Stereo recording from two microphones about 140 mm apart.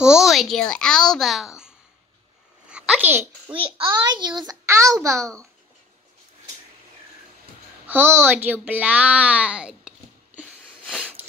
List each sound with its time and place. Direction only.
0.0 s a woman's voice: 5° right (ahead or behind)
2.7 s a sound: 10° right (ahead or behind)
3.4 s a child's voice: 30° right (ahead or behind)
7.8 s a child's voice: 15° right (ahead or behind)